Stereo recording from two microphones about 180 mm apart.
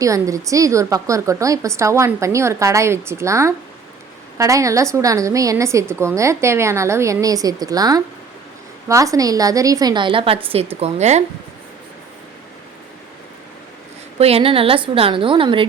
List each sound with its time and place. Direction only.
0.0 s a woman's voice: 20° right (ahead or behind); by 11.2 s 40° right (ahead or behind)
14.2 s a woman's voice: 35° right (ahead or behind)